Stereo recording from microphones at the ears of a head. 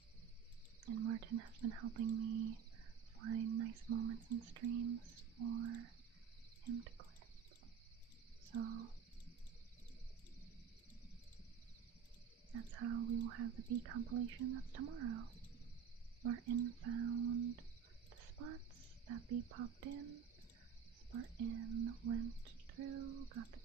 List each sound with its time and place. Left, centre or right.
0.9 s speech: right
6.7 s frog: right
8.4 s speech: right
12.5 s speech: right
18.1 s whispering: right
19.0 s speech: right